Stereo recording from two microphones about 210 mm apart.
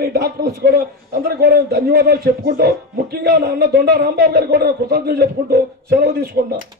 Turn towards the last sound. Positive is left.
turn(degrees=-50)  # may be behind; listen again after turning